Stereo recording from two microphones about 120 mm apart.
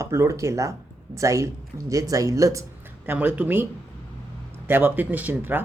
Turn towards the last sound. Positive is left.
turn(degrees=-15)  # may be behind; listen again after turning